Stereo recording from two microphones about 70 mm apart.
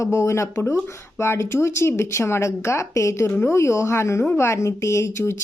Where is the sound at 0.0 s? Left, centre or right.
Left.